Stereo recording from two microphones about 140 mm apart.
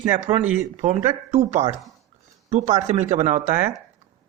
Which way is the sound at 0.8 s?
55° right (ahead or behind).